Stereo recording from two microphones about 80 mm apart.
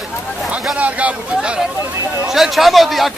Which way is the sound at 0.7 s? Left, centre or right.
Centre.